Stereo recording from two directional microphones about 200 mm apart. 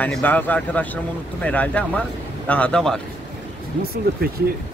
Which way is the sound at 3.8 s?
50° right (ahead or behind).